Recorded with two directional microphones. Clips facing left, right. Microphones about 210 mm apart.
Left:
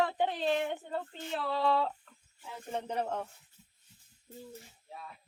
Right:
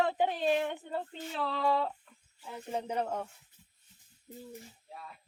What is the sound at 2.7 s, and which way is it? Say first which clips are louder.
Speech: right 1 dB; 10° right (ahead or behind).